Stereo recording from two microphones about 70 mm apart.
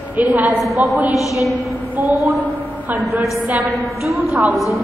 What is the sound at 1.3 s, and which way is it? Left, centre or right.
Music, centre.